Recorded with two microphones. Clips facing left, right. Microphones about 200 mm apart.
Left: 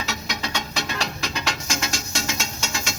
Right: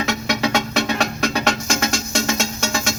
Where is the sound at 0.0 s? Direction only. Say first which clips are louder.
Right 9 dB; 60° right (ahead or behind).